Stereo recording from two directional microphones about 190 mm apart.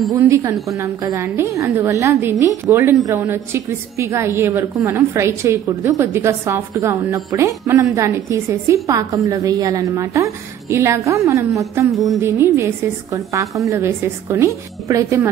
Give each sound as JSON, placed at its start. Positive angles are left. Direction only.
{"t": 0.1, "sound": "a woman's voice", "side_deg": -15}